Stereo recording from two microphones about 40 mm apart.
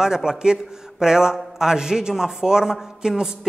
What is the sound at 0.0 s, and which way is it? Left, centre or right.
Speech, centre.